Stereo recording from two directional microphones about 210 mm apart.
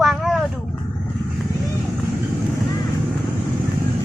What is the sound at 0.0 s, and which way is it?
Vehicle, centre (ahead or behind).